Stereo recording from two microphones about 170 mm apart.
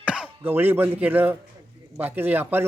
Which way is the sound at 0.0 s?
5° right (ahead or behind).